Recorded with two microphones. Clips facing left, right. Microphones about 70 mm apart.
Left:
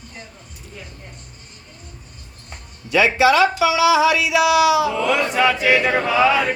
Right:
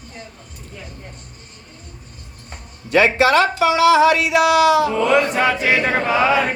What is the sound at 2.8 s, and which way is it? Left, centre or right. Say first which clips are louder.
Speech: right 1 dB; right.